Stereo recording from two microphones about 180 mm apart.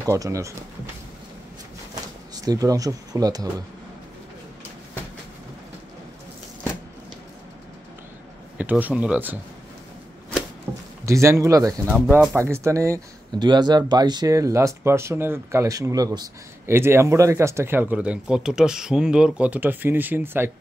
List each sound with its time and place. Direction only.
0.0 s speech: 20° right (ahead or behind)
2.3 s speech: 20° right (ahead or behind)
8.5 s speech: 10° right (ahead or behind)
10.7 s a sound: 10° right (ahead or behind)
11.1 s speech: 15° right (ahead or behind)